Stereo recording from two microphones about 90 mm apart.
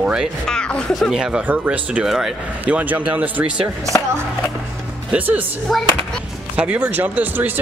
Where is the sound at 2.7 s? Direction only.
15° right (ahead or behind).